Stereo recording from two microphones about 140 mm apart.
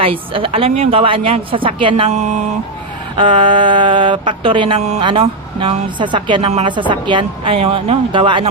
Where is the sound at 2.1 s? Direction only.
55° right (ahead or behind).